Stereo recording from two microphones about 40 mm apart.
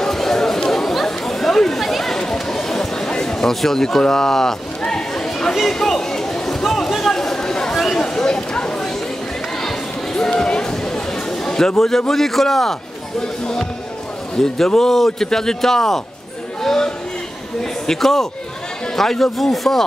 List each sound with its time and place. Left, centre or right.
0.0 s chatter: centre
2.3 s a sound: centre
12.1 s speech: centre
14.4 s speech: centre
16.6 s a sound: centre
17.6 s speech: centre